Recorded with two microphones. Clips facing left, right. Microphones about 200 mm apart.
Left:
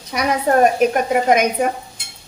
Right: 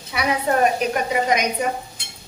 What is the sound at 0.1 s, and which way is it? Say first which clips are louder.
Speech: left 4 dB; 45° left (ahead or behind).